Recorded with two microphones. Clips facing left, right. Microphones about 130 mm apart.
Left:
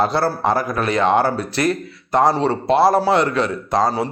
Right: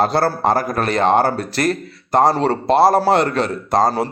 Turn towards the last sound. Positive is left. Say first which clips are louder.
# right 2 dB
turn(degrees=-40)  # may be behind; listen again after turning